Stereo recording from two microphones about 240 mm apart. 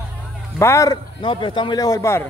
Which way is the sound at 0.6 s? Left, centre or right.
Centre.